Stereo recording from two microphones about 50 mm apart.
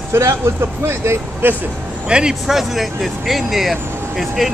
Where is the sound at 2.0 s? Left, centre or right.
Centre.